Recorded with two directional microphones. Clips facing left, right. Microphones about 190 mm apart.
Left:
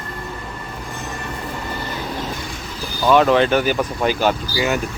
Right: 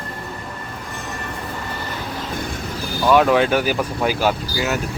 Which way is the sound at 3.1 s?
5° right (ahead or behind).